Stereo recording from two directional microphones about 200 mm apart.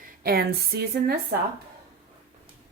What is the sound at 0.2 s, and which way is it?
Speech, 50° right (ahead or behind).